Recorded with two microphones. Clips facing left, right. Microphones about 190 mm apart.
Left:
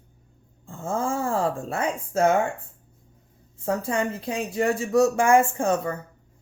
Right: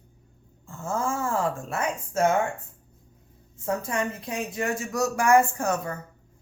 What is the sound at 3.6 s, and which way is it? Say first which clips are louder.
Speech: left 3 dB; 30° left (ahead or behind).